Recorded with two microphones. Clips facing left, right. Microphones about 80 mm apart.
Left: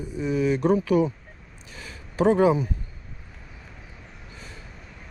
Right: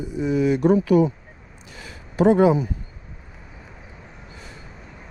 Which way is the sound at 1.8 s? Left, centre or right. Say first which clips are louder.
Right 4 dB; right.